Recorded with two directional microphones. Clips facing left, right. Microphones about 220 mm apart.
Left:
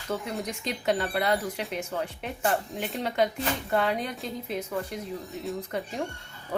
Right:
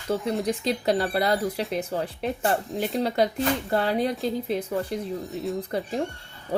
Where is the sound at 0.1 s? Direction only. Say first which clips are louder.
Right 7 dB; 30° right (ahead or behind).